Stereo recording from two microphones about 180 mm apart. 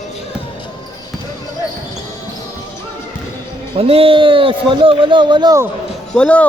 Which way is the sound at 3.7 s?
30° right (ahead or behind).